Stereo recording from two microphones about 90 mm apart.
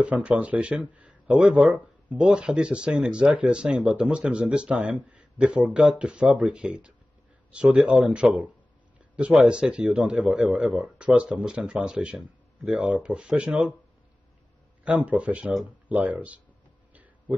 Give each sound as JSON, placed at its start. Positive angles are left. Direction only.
{"t": 0.0, "sound": "speech", "side_deg": -15}
{"t": 14.9, "sound": "speech", "side_deg": -15}